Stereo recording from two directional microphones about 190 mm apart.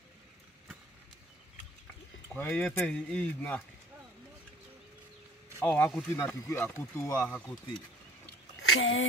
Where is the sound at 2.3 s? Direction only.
10° left (ahead or behind).